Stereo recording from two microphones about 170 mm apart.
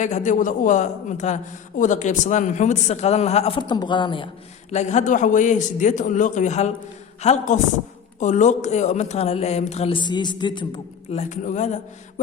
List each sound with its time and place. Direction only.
0.0 s a man's voice: 45° left (ahead or behind); by 4.3 s 30° left (ahead or behind)
4.7 s a man's voice: 45° left (ahead or behind)
11.1 s a man's voice: 45° left (ahead or behind)